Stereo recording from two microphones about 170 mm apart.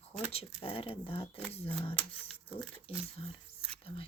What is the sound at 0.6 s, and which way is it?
Speech, 35° left (ahead or behind).